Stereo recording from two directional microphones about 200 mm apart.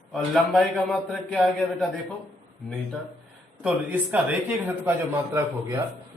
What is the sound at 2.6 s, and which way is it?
A man's voice, centre (ahead or behind).